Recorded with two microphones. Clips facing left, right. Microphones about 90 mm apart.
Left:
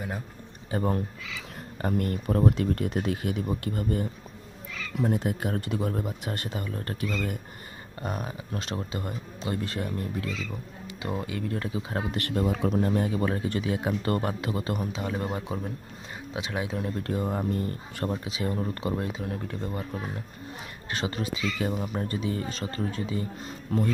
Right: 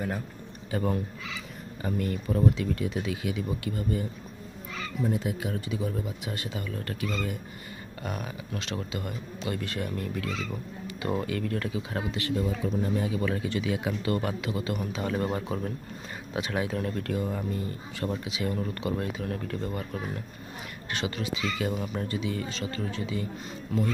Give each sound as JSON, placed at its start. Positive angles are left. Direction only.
{"t": 0.7, "sound": "speech", "side_deg": 35}
{"t": 1.8, "sound": "speech", "side_deg": 50}
{"t": 6.6, "sound": "speech", "side_deg": 35}
{"t": 11.0, "sound": "speech", "side_deg": 15}
{"t": 12.1, "sound": "speech", "side_deg": 50}
{"t": 15.0, "sound": "speech", "side_deg": 15}
{"t": 17.2, "sound": "speech", "side_deg": 45}
{"t": 18.2, "sound": "speech", "side_deg": 35}
{"t": 20.9, "sound": "speech", "side_deg": 35}
{"t": 22.0, "sound": "speech", "side_deg": 40}